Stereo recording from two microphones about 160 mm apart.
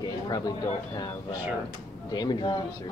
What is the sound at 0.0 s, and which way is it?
Speech, 25° left (ahead or behind).